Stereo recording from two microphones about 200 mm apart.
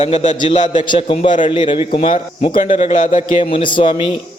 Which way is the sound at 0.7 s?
25° left (ahead or behind).